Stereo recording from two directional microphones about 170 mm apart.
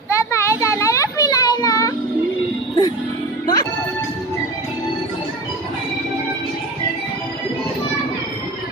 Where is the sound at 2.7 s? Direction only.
25° left (ahead or behind).